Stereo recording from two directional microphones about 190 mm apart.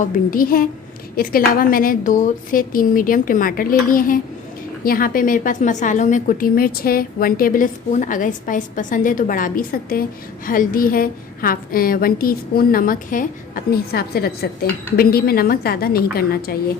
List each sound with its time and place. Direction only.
0.3 s a woman's voice: 50° left (ahead or behind)